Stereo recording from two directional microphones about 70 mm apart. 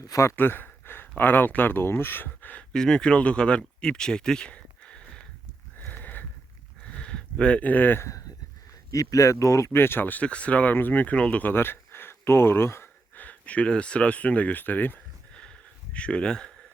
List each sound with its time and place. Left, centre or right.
0.0 s speech: left
0.3 s speech: left
2.7 s speech: centre
3.8 s a sound: centre; by 8.0 s left
8.9 s speech: left
11.5 s speech: left
13.1 s speech: left
15.4 s a sound: centre